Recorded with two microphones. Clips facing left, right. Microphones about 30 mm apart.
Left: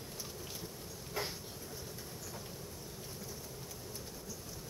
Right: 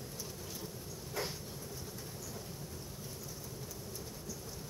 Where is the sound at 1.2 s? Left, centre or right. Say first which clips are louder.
Even; centre.